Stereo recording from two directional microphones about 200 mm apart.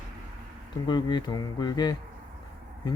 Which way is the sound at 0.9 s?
20° left (ahead or behind).